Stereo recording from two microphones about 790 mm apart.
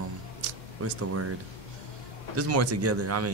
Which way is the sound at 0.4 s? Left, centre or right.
Centre.